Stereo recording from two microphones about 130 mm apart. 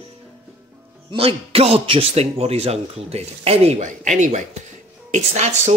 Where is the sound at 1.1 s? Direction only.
45° right (ahead or behind); by 5.7 s 60° right (ahead or behind).